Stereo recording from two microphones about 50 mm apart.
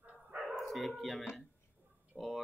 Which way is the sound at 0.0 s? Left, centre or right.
Right.